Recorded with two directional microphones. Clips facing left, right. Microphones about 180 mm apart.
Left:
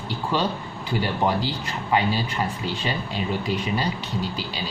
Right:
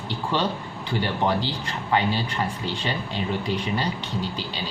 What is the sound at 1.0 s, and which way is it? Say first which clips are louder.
Speech: left 1 dB; 10° left (ahead or behind).